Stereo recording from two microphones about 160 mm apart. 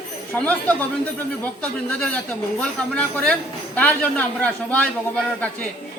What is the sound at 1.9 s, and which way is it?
Speech, 5° left (ahead or behind).